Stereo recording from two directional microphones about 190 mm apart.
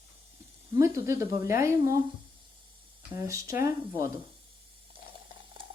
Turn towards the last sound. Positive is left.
turn(degrees=-15)  # may be behind; listen again after turning